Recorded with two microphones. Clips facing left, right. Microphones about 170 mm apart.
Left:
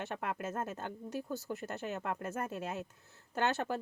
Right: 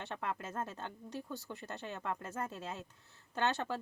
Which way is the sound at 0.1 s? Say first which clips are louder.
Left 3 dB; 15° left (ahead or behind).